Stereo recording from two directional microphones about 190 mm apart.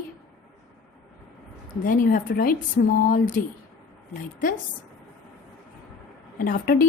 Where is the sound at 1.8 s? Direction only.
45° left (ahead or behind).